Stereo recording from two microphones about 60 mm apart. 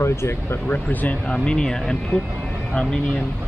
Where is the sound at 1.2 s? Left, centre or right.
Centre.